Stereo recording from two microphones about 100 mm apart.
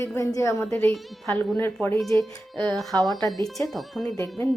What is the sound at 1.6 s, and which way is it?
Speech, 20° left (ahead or behind).